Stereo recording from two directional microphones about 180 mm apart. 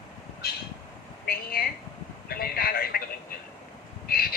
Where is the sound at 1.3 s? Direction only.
55° left (ahead or behind).